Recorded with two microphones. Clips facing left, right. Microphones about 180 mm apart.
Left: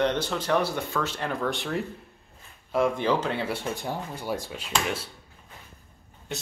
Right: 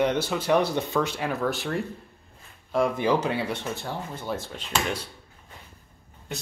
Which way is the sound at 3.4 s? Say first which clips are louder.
Left 1 dB; 10° left (ahead or behind).